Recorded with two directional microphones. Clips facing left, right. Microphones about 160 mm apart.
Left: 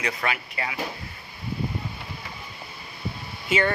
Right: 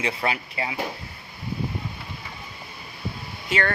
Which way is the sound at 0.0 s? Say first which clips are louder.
Right 2 dB; 30° right (ahead or behind).